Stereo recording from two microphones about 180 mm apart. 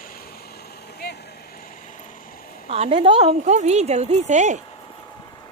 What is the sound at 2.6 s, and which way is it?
Speech, 35° right (ahead or behind).